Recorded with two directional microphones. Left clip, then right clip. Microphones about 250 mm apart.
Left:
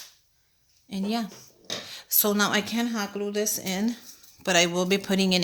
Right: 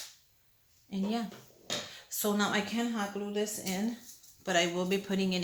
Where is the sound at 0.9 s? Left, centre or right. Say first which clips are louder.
Left 5 dB; left.